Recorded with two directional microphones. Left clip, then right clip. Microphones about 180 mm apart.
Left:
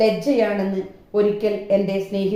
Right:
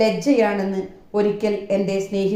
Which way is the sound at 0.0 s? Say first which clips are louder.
Even; 30° right (ahead or behind).